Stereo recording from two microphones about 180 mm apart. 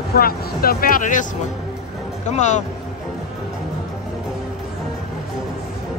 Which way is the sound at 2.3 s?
40° left (ahead or behind).